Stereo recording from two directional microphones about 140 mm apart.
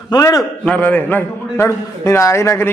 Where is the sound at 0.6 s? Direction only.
10° left (ahead or behind).